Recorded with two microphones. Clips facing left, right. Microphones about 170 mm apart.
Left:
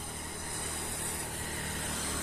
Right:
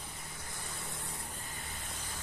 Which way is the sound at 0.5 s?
60° left (ahead or behind).